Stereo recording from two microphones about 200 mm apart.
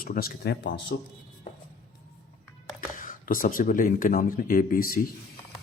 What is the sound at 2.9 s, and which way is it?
Speech, 45° left (ahead or behind).